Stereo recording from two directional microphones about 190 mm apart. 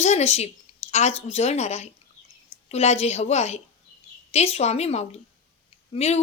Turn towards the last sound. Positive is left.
turn(degrees=35)  # may be behind; listen again after turning